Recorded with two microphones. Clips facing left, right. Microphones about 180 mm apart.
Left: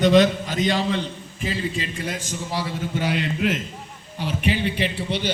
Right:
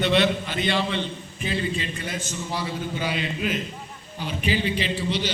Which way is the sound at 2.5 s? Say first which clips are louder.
Left 3 dB; 70° left (ahead or behind).